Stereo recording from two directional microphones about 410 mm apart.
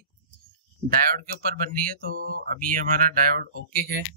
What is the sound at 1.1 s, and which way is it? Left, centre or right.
Speech, right.